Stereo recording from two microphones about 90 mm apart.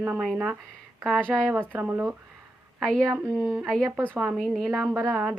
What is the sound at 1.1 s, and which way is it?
Speech, 10° left (ahead or behind).